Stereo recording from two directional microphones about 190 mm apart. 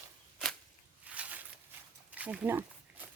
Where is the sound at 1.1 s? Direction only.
5° right (ahead or behind).